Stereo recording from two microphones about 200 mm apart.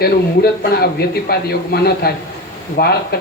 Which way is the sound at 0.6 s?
50° left (ahead or behind).